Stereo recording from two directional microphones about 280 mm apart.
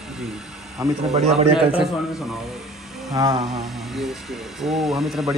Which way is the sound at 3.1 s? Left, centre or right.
Centre.